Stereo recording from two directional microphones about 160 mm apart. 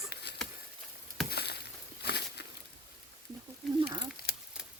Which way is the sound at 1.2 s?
90° left.